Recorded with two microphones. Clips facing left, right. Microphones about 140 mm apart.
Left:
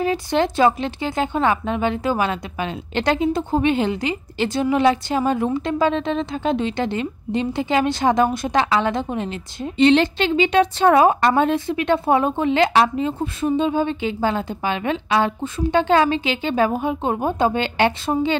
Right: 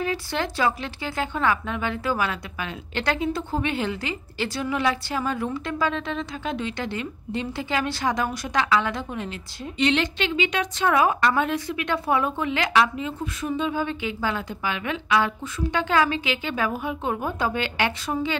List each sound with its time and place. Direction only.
0.0 s speech: 25° left (ahead or behind)